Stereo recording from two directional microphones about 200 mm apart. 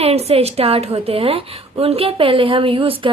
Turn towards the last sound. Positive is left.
turn(degrees=-25)  # may be behind; listen again after turning